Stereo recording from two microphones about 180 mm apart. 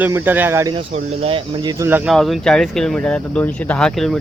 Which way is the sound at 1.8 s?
10° right (ahead or behind).